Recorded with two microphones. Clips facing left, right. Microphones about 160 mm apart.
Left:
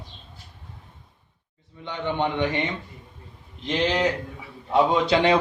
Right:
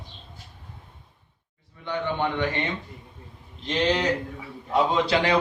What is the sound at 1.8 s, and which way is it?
Speech, 20° left (ahead or behind).